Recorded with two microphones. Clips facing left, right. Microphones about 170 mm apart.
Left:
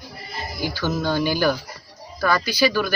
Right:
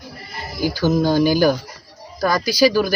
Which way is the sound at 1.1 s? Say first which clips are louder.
Right 3 dB; 40° right (ahead or behind).